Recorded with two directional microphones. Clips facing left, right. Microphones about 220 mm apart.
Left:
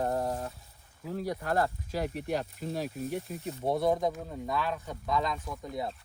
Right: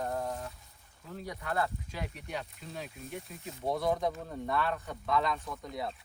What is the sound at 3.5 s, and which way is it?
Speech, 30° left (ahead or behind).